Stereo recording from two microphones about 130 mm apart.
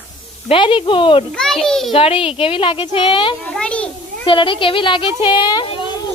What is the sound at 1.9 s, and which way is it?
Speech, 45° left (ahead or behind).